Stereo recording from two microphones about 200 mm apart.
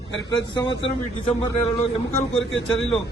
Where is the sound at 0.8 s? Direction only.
30° left (ahead or behind).